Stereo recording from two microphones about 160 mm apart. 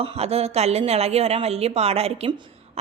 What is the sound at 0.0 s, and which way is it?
A woman's voice, 40° right (ahead or behind).